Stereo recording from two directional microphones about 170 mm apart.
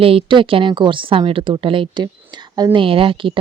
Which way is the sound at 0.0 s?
35° right (ahead or behind).